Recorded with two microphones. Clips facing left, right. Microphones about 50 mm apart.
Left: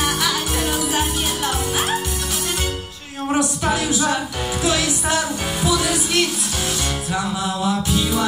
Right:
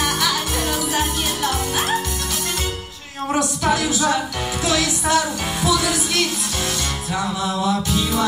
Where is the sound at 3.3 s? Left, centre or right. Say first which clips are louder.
Even; centre.